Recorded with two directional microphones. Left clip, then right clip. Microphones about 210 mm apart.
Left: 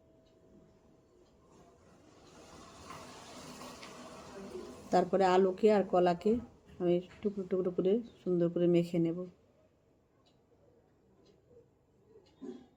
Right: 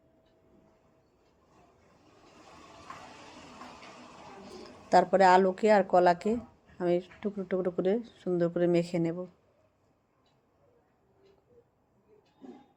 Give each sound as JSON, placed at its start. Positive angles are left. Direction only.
{"t": 2.9, "sound": "vehicle", "side_deg": -20}
{"t": 4.9, "sound": "speech", "side_deg": -20}